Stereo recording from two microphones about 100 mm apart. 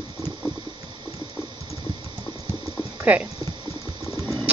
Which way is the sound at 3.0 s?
15° right (ahead or behind).